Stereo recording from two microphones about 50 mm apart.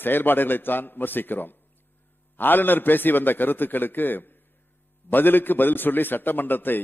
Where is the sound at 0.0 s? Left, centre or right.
Left.